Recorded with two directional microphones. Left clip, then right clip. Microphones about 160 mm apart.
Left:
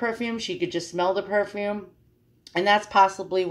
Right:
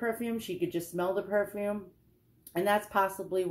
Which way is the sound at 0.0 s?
10° left (ahead or behind).